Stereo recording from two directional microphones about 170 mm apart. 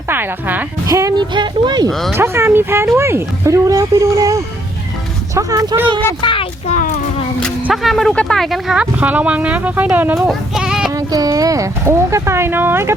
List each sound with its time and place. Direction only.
0.1 s speech: 10° right (ahead or behind)
1.9 s speech: centre (ahead or behind)
2.1 s speech: 15° right (ahead or behind)
6.2 s a sound: 30° left (ahead or behind)
7.3 s speech: centre (ahead or behind)
10.2 s a sound: centre (ahead or behind)
10.9 s speech: 20° right (ahead or behind)